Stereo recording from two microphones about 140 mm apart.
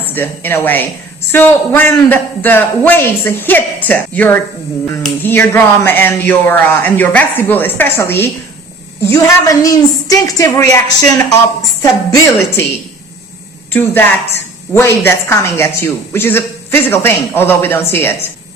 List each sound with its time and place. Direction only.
0.0 s a woman's voice: 15° left (ahead or behind)
11.8 s a woman's voice: 20° left (ahead or behind)
13.7 s a woman's voice: 15° left (ahead or behind)